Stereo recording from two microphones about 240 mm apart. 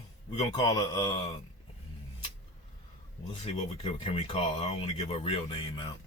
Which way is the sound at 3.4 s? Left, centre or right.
Left.